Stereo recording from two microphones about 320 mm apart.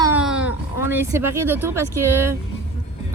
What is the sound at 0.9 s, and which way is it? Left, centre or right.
A woman's voice, centre.